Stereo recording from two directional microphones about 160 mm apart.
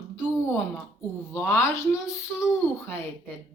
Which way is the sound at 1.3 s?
15° left (ahead or behind).